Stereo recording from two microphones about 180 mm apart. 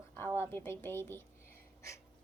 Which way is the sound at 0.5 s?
15° left (ahead or behind).